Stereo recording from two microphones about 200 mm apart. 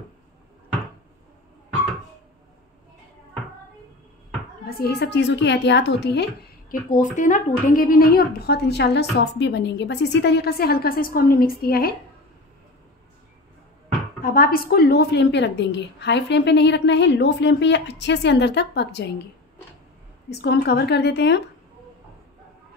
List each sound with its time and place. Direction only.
4.6 s a woman's voice: 50° left (ahead or behind)
7.2 s speech: 40° left (ahead or behind)
14.2 s a woman's voice: 45° left (ahead or behind)
20.2 s a woman's voice: 55° left (ahead or behind)